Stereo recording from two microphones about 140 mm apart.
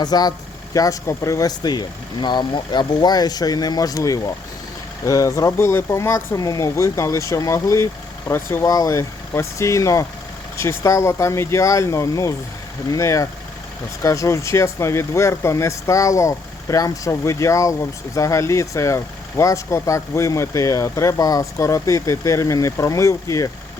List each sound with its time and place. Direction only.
0.0 s speech: 30° left (ahead or behind)